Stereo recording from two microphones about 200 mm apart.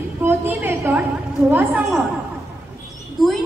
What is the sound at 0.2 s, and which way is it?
A woman's voice, 10° right (ahead or behind).